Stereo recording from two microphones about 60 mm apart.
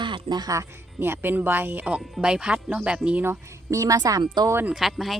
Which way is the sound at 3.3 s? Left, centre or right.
Right.